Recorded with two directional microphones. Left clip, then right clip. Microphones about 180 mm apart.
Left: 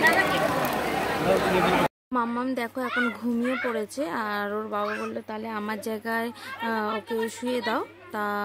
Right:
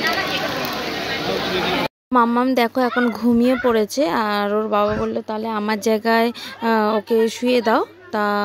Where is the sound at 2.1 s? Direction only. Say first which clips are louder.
Right 14 dB; 35° right (ahead or behind).